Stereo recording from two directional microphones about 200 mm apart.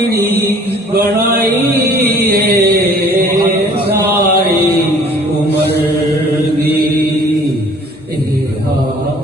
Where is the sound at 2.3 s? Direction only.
50° right (ahead or behind).